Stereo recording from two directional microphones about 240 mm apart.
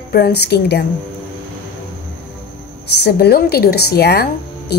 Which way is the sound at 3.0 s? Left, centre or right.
Left.